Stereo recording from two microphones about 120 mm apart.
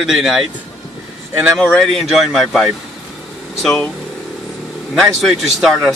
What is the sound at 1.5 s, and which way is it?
Speech, 10° left (ahead or behind).